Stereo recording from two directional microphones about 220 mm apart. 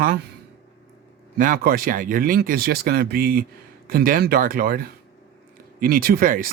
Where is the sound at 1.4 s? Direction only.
40° right (ahead or behind).